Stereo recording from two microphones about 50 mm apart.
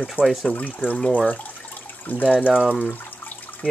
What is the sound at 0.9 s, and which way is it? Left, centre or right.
Speech, centre.